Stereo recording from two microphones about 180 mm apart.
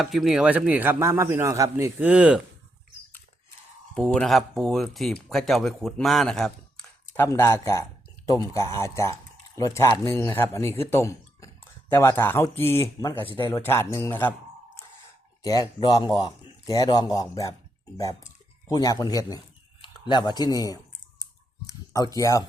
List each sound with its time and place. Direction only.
0.0 s speech: centre (ahead or behind)
3.9 s speech: 5° left (ahead or behind)
7.3 s speech: 15° left (ahead or behind)
15.8 s speech: 25° left (ahead or behind)
21.9 s speech: 20° left (ahead or behind)